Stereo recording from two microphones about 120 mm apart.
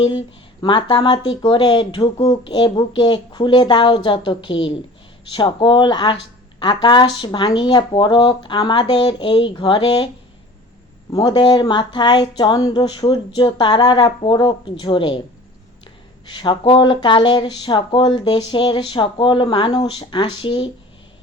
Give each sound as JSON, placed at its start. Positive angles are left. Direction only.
{"t": 0.0, "sound": "speech", "side_deg": 40}
{"t": 2.3, "sound": "speech", "side_deg": 40}
{"t": 11.1, "sound": "speech", "side_deg": 40}
{"t": 16.2, "sound": "speech", "side_deg": 40}